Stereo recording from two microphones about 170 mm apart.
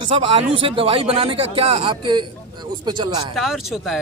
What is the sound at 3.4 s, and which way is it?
Speech, centre (ahead or behind).